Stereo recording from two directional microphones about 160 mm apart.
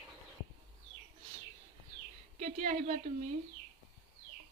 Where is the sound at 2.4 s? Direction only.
50° right (ahead or behind).